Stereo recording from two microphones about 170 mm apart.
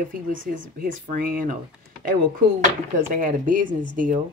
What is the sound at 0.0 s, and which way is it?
Speech, 55° right (ahead or behind).